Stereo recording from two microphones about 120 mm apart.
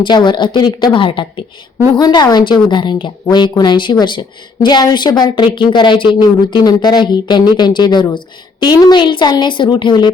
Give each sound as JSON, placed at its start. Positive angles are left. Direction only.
{"t": 0.0, "sound": "a woman's voice", "side_deg": 40}
{"t": 2.0, "sound": "a woman's voice", "side_deg": 35}